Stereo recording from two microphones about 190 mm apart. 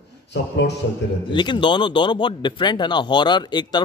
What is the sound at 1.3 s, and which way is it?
Speech, 25° left (ahead or behind).